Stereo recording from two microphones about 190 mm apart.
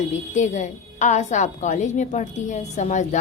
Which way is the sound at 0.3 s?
40° left (ahead or behind).